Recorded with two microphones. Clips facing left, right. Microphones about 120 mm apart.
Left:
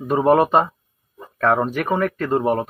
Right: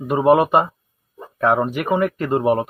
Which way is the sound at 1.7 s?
10° right (ahead or behind).